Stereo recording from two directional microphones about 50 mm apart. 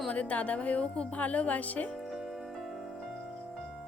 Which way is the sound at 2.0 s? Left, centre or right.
Centre.